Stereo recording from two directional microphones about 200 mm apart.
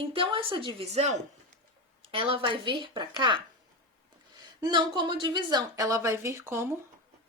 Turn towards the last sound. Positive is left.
turn(degrees=-15)  # may be behind; listen again after turning